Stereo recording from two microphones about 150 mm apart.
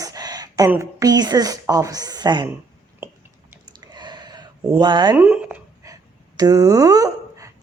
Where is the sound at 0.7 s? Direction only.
20° right (ahead or behind).